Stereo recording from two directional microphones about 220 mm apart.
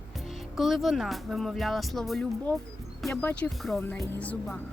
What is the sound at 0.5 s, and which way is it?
Speech, centre (ahead or behind).